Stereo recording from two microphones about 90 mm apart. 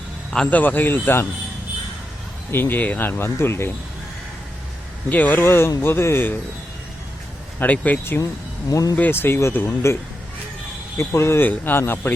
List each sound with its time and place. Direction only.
0.5 s speech: 20° left (ahead or behind)
2.5 s speech: 25° left (ahead or behind)
5.0 s speech: 20° left (ahead or behind)
7.6 s speech: 20° left (ahead or behind)
8.7 s speech: 40° left (ahead or behind)
9.0 s speech: 25° left (ahead or behind)